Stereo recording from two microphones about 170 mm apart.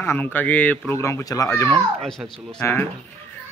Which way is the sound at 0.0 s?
10° left (ahead or behind).